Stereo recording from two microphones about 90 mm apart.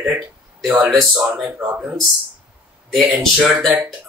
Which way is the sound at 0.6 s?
Centre (ahead or behind).